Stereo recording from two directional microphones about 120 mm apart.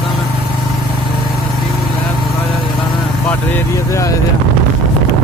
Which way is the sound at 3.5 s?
25° left (ahead or behind).